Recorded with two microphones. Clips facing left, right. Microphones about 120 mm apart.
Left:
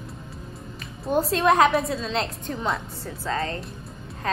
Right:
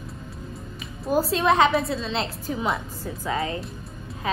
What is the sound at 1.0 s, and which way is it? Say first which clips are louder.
A woman's voice: even; centre (ahead or behind).